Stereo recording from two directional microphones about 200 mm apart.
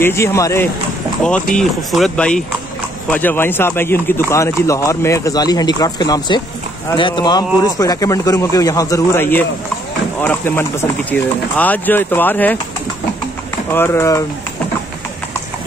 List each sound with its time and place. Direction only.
0.0 s speech: 15° left (ahead or behind)
13.7 s speech: 15° left (ahead or behind)